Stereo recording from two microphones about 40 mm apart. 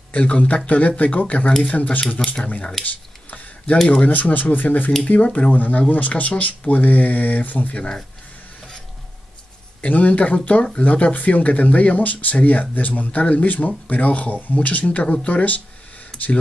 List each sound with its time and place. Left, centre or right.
0.1 s speech: left
2.8 s a sound: left
4.0 s speech: left
9.8 s speech: left